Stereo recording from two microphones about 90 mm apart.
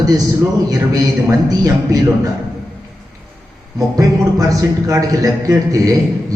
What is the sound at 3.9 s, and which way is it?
Speech, 40° right (ahead or behind).